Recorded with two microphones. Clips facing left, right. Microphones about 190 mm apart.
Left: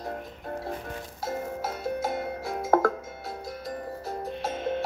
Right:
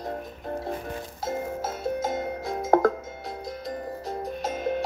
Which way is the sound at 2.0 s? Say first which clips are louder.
Right 2 dB; 20° right (ahead or behind).